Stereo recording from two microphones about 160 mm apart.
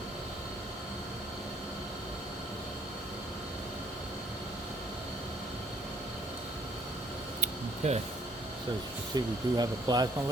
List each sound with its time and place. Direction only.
7.8 s speech: 45° right (ahead or behind)
9.1 s speech: 25° right (ahead or behind)